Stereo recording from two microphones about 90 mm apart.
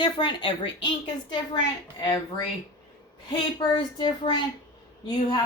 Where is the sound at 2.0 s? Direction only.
60° left (ahead or behind).